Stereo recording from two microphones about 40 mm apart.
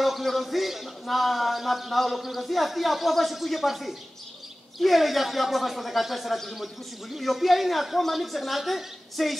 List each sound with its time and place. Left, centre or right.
0.0 s a man's voice: centre